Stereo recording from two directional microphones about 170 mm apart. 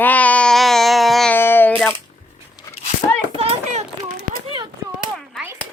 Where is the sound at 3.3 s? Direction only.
35° right (ahead or behind).